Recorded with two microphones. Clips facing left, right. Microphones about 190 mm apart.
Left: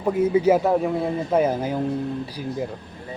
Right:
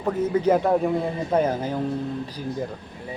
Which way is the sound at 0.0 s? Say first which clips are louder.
Left 3 dB; 10° left (ahead or behind).